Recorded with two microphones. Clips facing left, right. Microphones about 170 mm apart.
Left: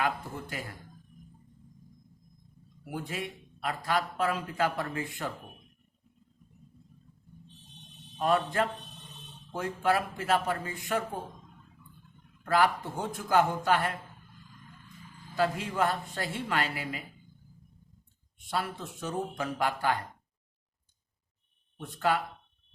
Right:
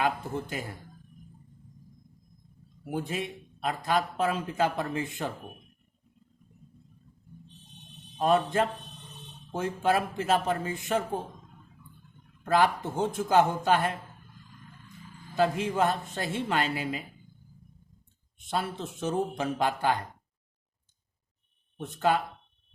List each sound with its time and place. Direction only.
0.0 s a man's voice: 20° right (ahead or behind)
2.8 s a man's voice: 25° right (ahead or behind)
8.2 s a man's voice: 20° right (ahead or behind)
12.4 s a man's voice: 20° right (ahead or behind)
15.4 s a man's voice: 20° right (ahead or behind)
18.5 s a man's voice: 20° right (ahead or behind)
21.8 s a man's voice: 25° right (ahead or behind)